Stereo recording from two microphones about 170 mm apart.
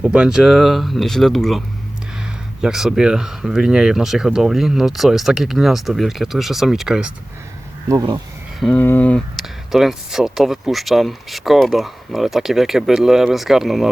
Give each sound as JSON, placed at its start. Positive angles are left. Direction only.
{"t": 0.0, "sound": "speech", "side_deg": -5}
{"t": 7.9, "sound": "speech", "side_deg": -20}
{"t": 8.5, "sound": "speech", "side_deg": 0}